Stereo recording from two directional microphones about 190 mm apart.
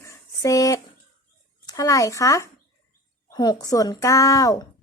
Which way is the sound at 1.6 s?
20° left (ahead or behind).